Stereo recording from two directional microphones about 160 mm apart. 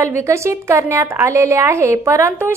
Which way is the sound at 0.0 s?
15° right (ahead or behind).